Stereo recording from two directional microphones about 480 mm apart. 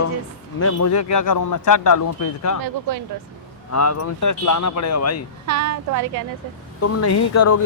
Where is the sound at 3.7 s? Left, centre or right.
Left.